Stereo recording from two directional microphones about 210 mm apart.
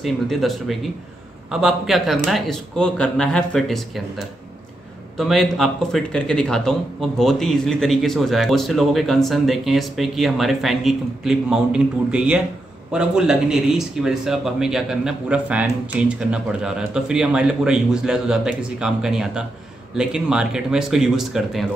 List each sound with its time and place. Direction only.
0.0 s a man's voice: centre (ahead or behind)
5.1 s a man's voice: centre (ahead or behind)